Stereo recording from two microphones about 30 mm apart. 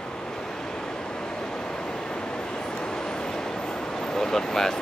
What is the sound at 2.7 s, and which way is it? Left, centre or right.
Vehicle, left.